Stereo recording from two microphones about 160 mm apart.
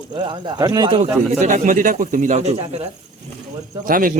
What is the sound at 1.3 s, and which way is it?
A man's voice, 50° right (ahead or behind).